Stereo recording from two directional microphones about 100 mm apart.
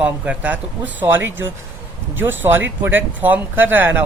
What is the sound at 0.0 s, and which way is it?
Speech, 15° right (ahead or behind).